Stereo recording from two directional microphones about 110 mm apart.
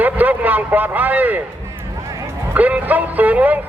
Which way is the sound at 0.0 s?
15° right (ahead or behind).